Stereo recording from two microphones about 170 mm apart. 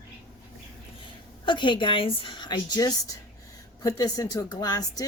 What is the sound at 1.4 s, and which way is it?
A woman's voice, 30° left (ahead or behind).